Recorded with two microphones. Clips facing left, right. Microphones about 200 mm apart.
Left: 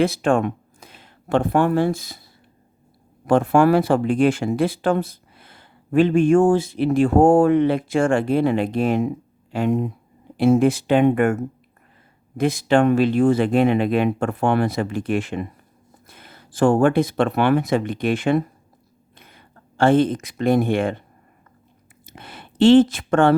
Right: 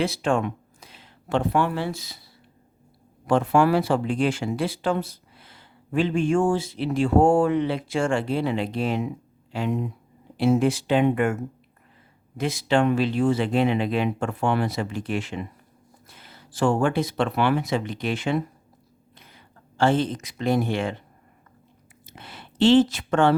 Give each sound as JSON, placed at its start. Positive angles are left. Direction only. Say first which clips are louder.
{"t": 0.0, "sound": "speech", "louder": "left 5 dB", "side_deg": 50}
{"t": 3.2, "sound": "speech", "louder": "left 4 dB", "side_deg": 50}
{"t": 12.4, "sound": "speech", "louder": "left 5 dB", "side_deg": 50}
{"t": 22.0, "sound": "a sound", "louder": "left 3 dB", "side_deg": 50}